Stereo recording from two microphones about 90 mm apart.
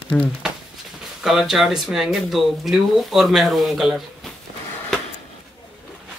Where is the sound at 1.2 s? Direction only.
5° right (ahead or behind).